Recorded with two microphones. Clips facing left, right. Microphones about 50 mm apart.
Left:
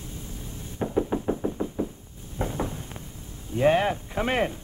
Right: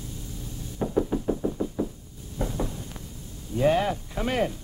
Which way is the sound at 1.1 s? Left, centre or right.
Left.